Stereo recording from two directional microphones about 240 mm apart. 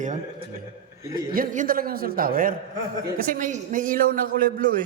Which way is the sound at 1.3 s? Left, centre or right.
Right.